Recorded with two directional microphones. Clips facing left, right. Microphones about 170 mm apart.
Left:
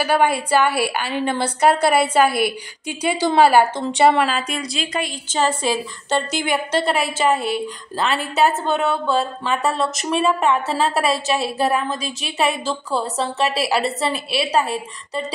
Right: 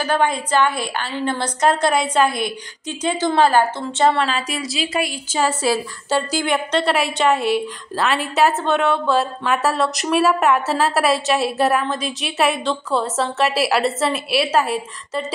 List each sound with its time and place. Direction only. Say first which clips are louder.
0.0 s a woman's voice: left 1 dB; 10° left (ahead or behind)
4.3 s a woman's voice: even; centre (ahead or behind)
6.4 s a woman's voice: right 1 dB; 5° left (ahead or behind)